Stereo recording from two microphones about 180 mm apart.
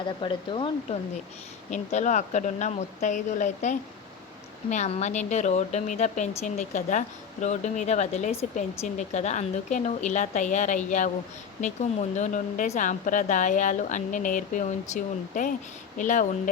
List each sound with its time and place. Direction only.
0.0 s speech: 25° left (ahead or behind)
1.7 s speech: 40° left (ahead or behind)